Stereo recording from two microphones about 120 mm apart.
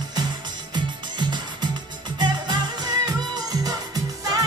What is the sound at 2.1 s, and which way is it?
Music, 35° right (ahead or behind).